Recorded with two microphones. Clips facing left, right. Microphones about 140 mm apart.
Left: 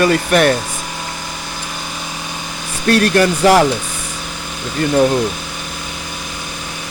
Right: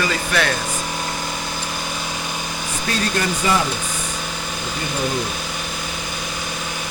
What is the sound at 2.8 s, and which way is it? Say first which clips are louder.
Speech: left 10 dB; 70° left (ahead or behind).